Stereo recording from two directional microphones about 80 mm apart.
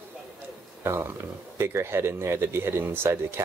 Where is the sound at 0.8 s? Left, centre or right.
Right.